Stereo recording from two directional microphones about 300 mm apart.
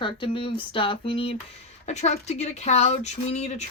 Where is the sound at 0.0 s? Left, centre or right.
Centre.